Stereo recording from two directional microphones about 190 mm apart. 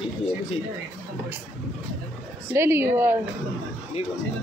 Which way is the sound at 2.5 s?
10° right (ahead or behind).